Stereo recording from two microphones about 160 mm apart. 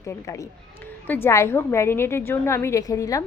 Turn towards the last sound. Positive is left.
turn(degrees=20)  # may be behind; listen again after turning